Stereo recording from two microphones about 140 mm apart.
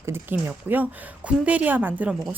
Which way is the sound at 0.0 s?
15° right (ahead or behind).